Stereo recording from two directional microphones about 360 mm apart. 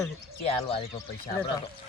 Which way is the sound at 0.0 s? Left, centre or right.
Centre.